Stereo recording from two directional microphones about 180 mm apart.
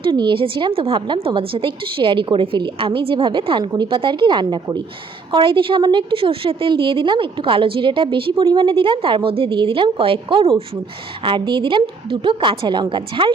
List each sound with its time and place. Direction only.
0.0 s a woman's voice: 25° right (ahead or behind)